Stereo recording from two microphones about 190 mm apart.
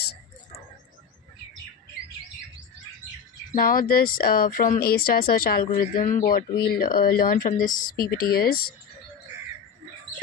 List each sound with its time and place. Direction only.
3.5 s speech: 45° left (ahead or behind)